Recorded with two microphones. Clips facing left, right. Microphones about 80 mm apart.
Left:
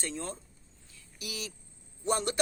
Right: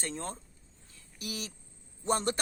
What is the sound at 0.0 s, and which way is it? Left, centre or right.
Speech, right.